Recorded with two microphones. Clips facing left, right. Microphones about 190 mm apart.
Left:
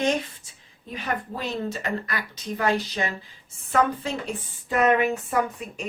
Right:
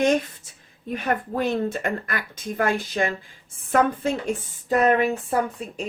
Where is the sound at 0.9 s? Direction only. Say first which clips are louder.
Right 5 dB; 50° right (ahead or behind).